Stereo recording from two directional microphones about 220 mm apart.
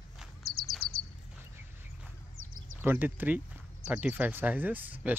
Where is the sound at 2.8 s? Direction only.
10° right (ahead or behind).